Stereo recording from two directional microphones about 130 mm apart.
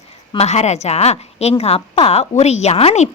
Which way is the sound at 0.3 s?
60° left (ahead or behind).